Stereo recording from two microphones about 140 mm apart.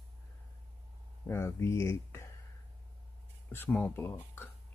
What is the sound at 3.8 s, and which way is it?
Speech, 15° left (ahead or behind).